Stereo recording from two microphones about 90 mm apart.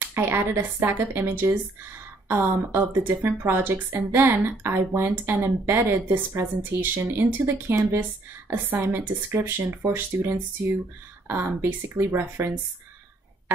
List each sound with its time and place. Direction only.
0.0 s a woman's voice: 25° right (ahead or behind)